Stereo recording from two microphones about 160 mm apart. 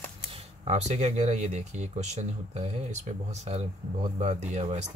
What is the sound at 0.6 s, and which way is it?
Speech, 45° right (ahead or behind).